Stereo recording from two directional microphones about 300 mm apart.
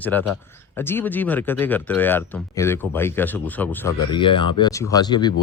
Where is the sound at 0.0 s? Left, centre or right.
Centre.